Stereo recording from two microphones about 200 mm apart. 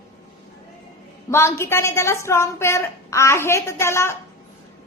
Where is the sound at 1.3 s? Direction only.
10° left (ahead or behind).